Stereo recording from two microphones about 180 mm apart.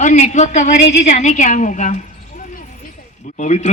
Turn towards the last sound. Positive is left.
turn(degrees=40)  # may be behind; listen again after turning